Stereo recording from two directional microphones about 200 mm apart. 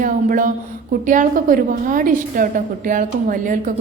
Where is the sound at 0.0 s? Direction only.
40° right (ahead or behind).